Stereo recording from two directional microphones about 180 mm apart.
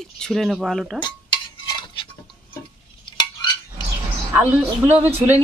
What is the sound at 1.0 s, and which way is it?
Stir, 25° left (ahead or behind).